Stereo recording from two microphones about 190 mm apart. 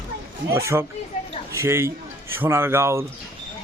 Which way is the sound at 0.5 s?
15° right (ahead or behind).